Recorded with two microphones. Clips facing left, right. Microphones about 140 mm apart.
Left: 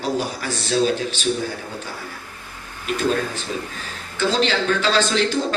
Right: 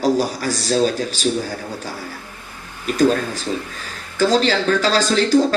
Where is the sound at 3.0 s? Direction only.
40° right (ahead or behind).